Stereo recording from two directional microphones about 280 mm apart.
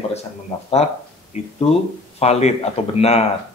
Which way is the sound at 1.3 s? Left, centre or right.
Left.